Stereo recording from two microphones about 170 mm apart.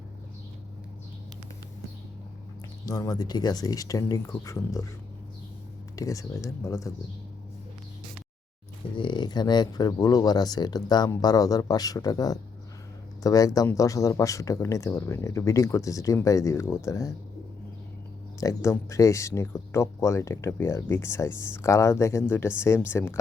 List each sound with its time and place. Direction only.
2.8 s speech: 20° left (ahead or behind)
6.0 s speech: 20° left (ahead or behind)
9.0 s speech: 25° left (ahead or behind)
18.3 s speech: 20° left (ahead or behind)